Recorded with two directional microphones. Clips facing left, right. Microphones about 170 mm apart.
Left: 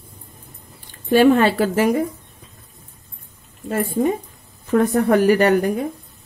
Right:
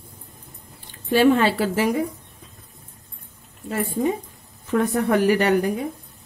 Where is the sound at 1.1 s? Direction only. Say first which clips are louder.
Left 3 dB; 50° left (ahead or behind).